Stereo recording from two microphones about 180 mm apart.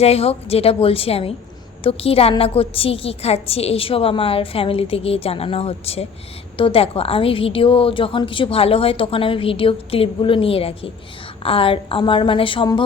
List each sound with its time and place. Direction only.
0.0 s a woman's voice: 35° left (ahead or behind)